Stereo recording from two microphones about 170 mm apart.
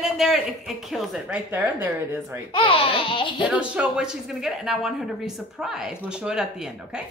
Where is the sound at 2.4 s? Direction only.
30° left (ahead or behind).